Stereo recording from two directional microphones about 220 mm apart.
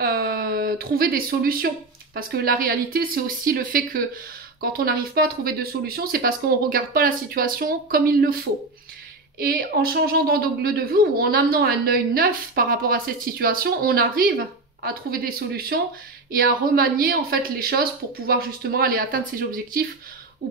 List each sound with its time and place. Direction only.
0.0 s a sound: 45° right (ahead or behind)
2.1 s a woman's voice: 40° right (ahead or behind)
9.4 s a woman's voice: 40° right (ahead or behind)